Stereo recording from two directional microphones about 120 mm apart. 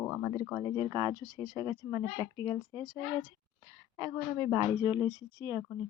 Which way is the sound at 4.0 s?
20° right (ahead or behind).